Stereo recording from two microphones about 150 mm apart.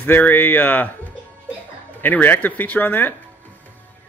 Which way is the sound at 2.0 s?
10° left (ahead or behind).